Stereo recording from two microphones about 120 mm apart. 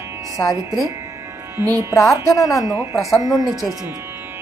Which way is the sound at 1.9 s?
25° left (ahead or behind).